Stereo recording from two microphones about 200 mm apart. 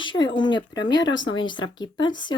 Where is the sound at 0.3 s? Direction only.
20° left (ahead or behind).